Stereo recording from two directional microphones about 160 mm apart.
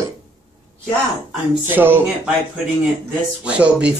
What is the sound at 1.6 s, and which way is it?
Speech, 10° right (ahead or behind).